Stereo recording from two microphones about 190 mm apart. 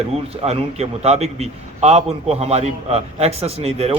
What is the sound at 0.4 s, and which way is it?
A man's voice, 35° right (ahead or behind).